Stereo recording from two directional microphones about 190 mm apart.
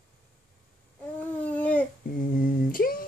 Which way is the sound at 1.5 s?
5° left (ahead or behind).